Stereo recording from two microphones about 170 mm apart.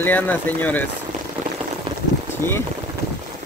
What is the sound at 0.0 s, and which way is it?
Speech, 10° left (ahead or behind).